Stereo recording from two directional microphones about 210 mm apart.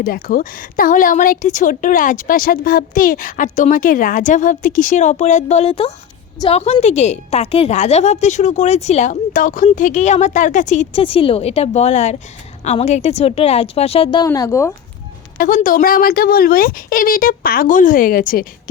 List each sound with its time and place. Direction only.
0.0 s a woman's voice: 45° left (ahead or behind); by 14.7 s 15° left (ahead or behind)
15.4 s speech: 40° left (ahead or behind)